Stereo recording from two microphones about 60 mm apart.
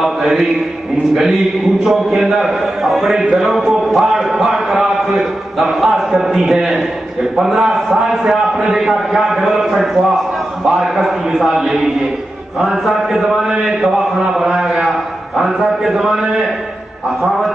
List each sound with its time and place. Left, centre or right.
0.0 s mantra: centre
1.1 s a man's voice: centre